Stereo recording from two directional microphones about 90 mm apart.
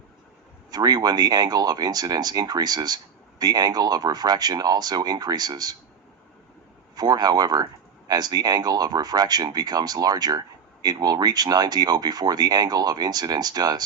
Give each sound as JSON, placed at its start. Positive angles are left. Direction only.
{"t": 0.7, "sound": "speech", "side_deg": -50}
{"t": 6.9, "sound": "speech", "side_deg": -50}